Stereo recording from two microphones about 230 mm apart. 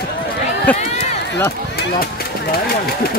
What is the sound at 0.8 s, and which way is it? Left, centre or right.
Run, left.